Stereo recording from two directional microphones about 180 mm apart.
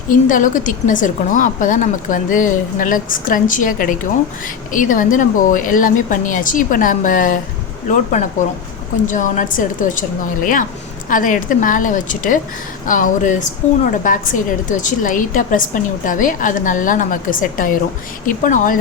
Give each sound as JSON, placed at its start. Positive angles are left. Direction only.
{"t": 0.3, "sound": "a woman's voice", "side_deg": 45}
{"t": 9.0, "sound": "a woman's voice", "side_deg": 45}